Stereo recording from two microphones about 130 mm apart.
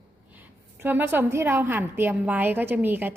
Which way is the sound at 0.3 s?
15° right (ahead or behind).